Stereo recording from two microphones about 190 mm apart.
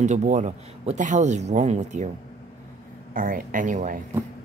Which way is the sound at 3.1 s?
45° right (ahead or behind).